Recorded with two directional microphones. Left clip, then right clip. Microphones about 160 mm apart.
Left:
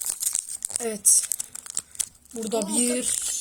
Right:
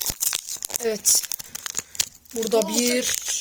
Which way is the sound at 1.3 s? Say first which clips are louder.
Right 3 dB; 30° right (ahead or behind).